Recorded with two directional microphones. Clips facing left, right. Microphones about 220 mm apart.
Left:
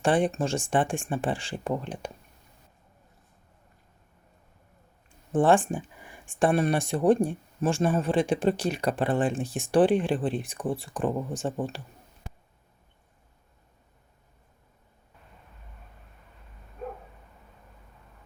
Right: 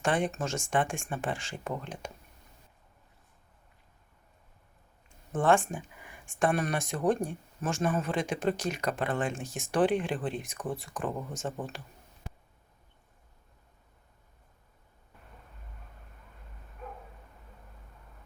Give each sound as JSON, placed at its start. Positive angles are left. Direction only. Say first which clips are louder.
{"t": 0.0, "sound": "speech", "louder": "left 5 dB", "side_deg": 30}
{"t": 5.3, "sound": "speech", "louder": "left 4 dB", "side_deg": 30}